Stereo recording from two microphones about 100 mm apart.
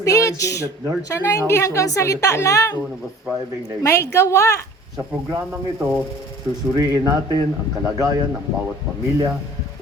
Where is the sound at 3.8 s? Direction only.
25° left (ahead or behind).